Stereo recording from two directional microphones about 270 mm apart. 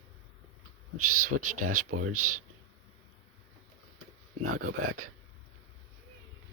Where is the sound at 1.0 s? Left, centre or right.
Right.